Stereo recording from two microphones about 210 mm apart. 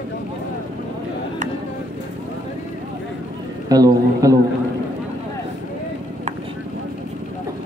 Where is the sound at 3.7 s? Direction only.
15° right (ahead or behind).